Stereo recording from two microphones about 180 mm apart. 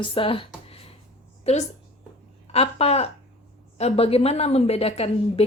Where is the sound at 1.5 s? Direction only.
35° left (ahead or behind).